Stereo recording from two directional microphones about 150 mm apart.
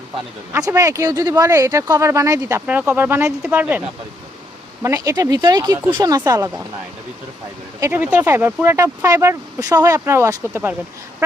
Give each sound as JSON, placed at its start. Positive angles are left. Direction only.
{"t": 0.5, "sound": "speech", "side_deg": -20}
{"t": 7.8, "sound": "speech", "side_deg": -15}